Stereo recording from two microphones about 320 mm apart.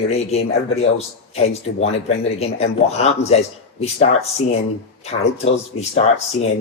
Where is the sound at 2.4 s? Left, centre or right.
Centre.